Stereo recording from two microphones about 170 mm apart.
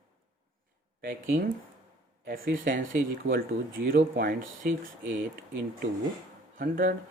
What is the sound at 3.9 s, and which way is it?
Speech, 55° right (ahead or behind).